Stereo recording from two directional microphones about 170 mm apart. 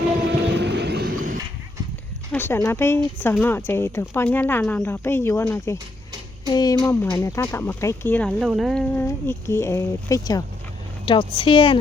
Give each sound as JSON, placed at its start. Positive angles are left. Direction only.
{"t": 0.4, "sound": "a sound", "side_deg": -85}
{"t": 2.3, "sound": "speech", "side_deg": 15}
{"t": 9.0, "sound": "speech", "side_deg": 15}